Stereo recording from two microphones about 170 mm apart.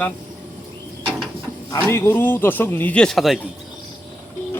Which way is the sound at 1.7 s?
15° left (ahead or behind).